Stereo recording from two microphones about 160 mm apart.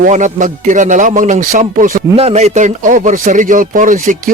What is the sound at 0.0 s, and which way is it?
A man's voice, 50° right (ahead or behind).